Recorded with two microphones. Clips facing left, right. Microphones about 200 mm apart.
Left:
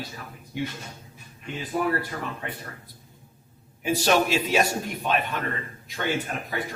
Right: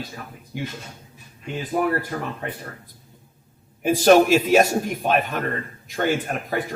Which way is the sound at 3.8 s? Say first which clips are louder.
Right 8 dB; 50° right (ahead or behind).